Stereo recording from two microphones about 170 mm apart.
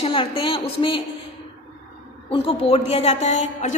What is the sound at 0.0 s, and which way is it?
A woman's voice, 30° left (ahead or behind).